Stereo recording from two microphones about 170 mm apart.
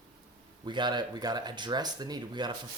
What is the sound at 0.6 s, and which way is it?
Speech, 25° right (ahead or behind).